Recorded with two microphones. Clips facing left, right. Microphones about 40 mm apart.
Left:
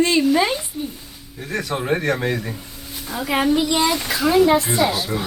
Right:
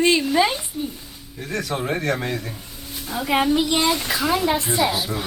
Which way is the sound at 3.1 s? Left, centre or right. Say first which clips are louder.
Left 1 dB; centre.